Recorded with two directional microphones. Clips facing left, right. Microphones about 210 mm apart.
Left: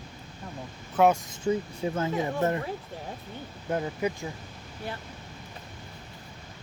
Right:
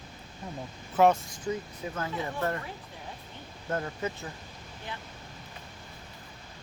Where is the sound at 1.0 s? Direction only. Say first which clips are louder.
Left 1 dB; centre (ahead or behind).